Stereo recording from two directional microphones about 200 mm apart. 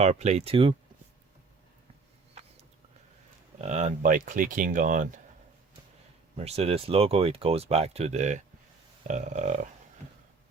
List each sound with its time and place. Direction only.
0.0 s speech: 35° right (ahead or behind)
3.6 s speech: 35° right (ahead or behind)
6.3 s speech: 30° right (ahead or behind)